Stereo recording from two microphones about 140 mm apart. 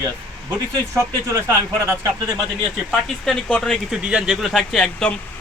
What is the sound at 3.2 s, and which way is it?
A man's voice, centre (ahead or behind).